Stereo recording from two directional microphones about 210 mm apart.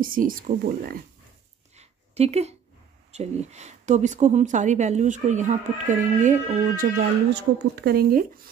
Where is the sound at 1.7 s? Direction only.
30° right (ahead or behind).